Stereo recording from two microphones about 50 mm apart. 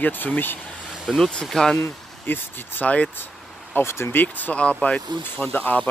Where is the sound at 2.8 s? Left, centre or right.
Left.